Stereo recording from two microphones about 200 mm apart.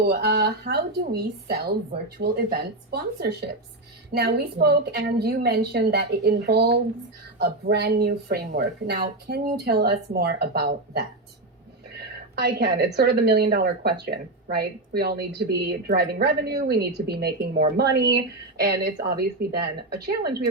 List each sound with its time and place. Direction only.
0.0 s a woman's voice: 50° right (ahead or behind)